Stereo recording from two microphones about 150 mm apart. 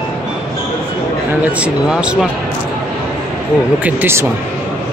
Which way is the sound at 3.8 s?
10° right (ahead or behind).